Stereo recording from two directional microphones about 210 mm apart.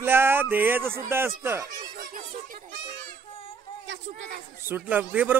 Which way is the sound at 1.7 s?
40° right (ahead or behind).